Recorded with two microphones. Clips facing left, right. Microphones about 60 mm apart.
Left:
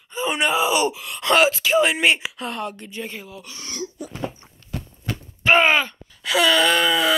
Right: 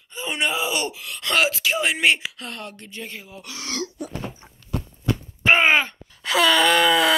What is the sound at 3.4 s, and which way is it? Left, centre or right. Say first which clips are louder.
Speech: right 6 dB; right.